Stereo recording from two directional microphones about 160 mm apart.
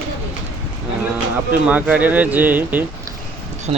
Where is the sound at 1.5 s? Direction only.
10° right (ahead or behind).